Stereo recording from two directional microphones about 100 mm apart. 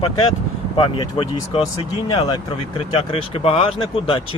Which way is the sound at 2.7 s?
65° left (ahead or behind).